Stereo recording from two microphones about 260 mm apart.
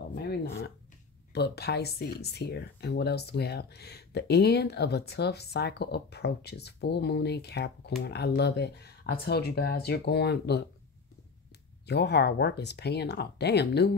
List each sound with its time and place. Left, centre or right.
0.1 s a sound: left
0.5 s speech: left
11.8 s speech: left